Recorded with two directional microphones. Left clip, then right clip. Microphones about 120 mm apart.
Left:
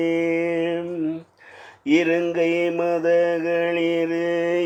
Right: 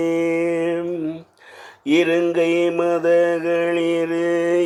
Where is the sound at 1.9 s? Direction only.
40° right (ahead or behind).